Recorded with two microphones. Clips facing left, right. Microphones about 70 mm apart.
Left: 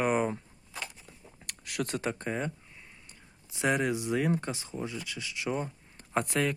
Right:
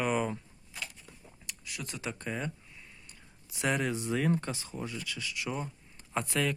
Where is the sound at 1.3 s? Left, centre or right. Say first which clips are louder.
Left 9 dB; left.